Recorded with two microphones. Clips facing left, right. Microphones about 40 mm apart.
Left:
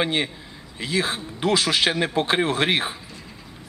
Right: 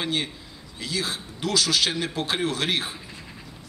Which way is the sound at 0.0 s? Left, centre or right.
Left.